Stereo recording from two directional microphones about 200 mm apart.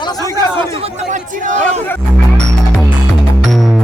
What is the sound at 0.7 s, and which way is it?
Chatter, 30° right (ahead or behind).